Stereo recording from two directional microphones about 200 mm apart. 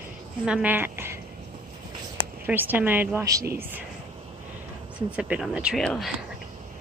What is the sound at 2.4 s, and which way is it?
Speech, 10° right (ahead or behind).